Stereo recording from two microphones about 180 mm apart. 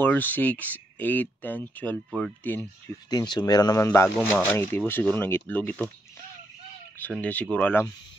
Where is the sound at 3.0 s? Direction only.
25° left (ahead or behind).